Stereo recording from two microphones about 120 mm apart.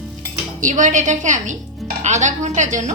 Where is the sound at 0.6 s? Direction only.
90° right.